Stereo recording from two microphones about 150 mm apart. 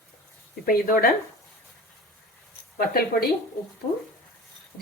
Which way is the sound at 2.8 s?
90° left.